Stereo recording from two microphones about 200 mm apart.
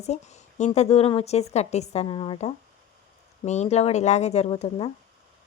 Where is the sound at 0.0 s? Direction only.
35° left (ahead or behind).